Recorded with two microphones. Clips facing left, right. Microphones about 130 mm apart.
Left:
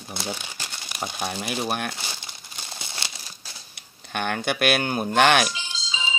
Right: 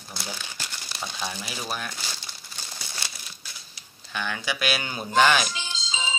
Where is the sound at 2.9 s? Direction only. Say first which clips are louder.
Left 2 dB; 30° left (ahead or behind).